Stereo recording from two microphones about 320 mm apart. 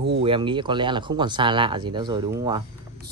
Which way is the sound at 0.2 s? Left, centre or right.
Centre.